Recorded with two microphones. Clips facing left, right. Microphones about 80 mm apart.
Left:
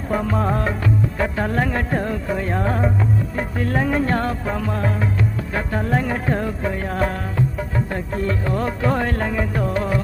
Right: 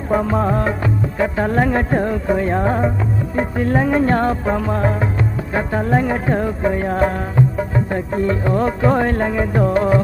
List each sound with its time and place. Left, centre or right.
0.1 s music: centre